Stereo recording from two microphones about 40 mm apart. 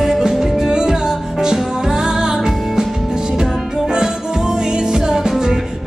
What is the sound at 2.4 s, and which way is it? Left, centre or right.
Music, centre.